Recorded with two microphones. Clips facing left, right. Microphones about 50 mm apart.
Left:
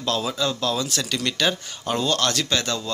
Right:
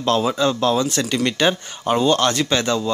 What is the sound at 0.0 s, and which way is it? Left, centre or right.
Speech, right.